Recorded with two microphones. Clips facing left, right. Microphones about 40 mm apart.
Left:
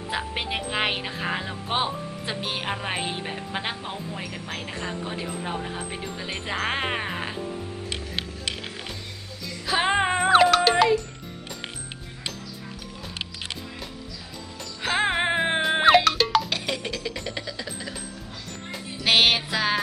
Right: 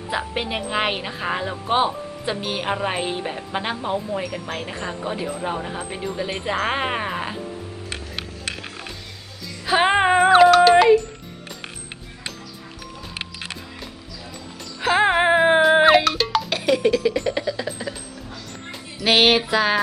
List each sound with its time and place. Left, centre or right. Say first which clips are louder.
0.1 s speech: right 4 dB; centre
9.6 s music: right 5 dB; right
10.3 s music: right 5 dB; centre
14.8 s music: right 6 dB; centre
19.0 s music: right 4 dB; centre